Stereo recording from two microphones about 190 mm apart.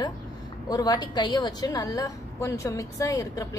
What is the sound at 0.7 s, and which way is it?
A woman's voice, 20° left (ahead or behind).